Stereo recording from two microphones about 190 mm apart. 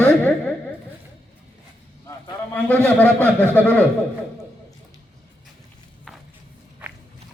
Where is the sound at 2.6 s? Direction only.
10° left (ahead or behind).